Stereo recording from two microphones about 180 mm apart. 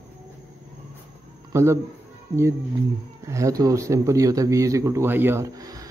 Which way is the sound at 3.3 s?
15° right (ahead or behind).